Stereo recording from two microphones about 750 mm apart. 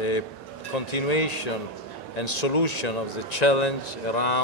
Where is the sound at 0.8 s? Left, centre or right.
Left.